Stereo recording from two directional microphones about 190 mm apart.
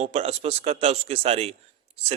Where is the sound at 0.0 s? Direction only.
35° right (ahead or behind).